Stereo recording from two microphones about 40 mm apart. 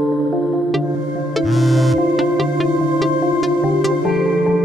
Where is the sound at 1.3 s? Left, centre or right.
Centre.